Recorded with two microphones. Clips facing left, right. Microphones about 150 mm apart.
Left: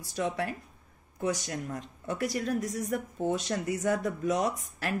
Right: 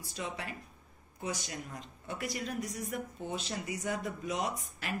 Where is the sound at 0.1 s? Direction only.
50° left (ahead or behind).